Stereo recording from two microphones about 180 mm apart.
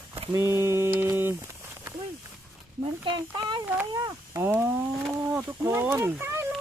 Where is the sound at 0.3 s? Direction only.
15° right (ahead or behind).